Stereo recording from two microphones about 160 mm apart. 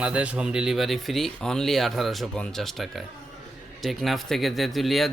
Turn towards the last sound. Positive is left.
turn(degrees=0)  # may be behind; listen again after turning